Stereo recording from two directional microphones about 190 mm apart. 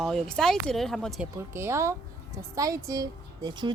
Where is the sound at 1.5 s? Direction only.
15° right (ahead or behind).